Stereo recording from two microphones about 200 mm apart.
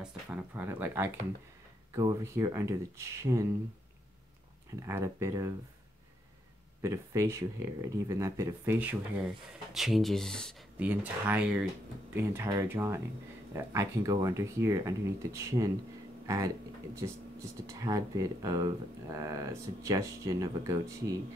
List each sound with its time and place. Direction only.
0.0 s speech: 10° right (ahead or behind)
4.8 s speech: 15° right (ahead or behind)
6.8 s speech: 15° right (ahead or behind); by 10.5 s 5° left (ahead or behind)
10.8 s speech: 5° right (ahead or behind)
16.3 s a sound: 15° right (ahead or behind)
17.6 s speech: 15° right (ahead or behind)